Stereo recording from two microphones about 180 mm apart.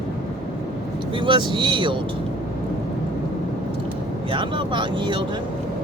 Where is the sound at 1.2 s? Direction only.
25° right (ahead or behind).